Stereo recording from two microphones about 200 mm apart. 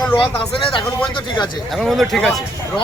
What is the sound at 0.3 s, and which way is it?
Speech, 25° left (ahead or behind).